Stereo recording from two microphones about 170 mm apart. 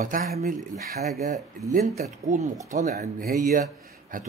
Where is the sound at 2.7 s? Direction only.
45° right (ahead or behind).